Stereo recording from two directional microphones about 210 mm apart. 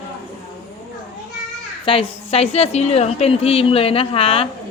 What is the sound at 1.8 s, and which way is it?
A woman's voice, 25° left (ahead or behind).